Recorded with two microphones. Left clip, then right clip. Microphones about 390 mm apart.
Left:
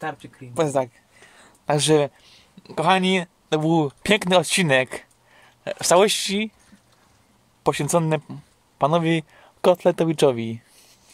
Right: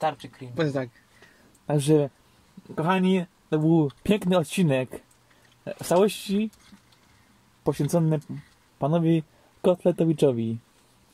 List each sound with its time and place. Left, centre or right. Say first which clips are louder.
1.7 s speech: left 4 dB; left
7.6 s speech: left 5 dB; left